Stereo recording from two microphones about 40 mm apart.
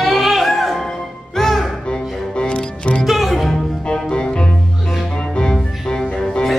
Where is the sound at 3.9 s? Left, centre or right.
Left.